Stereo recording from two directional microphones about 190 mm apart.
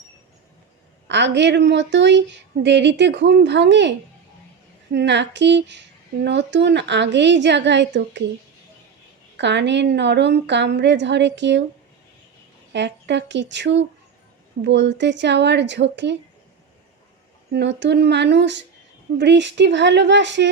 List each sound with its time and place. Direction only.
1.0 s a woman's voice: 65° right (ahead or behind)
9.4 s a woman's voice: 65° right (ahead or behind)
12.7 s a woman's voice: 65° right (ahead or behind)
17.5 s a woman's voice: 65° right (ahead or behind)